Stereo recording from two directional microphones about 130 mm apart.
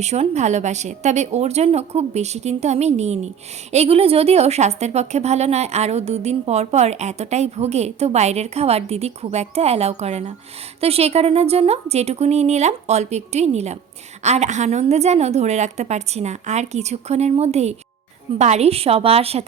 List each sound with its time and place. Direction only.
0.0 s a woman's voice: 55° right (ahead or behind)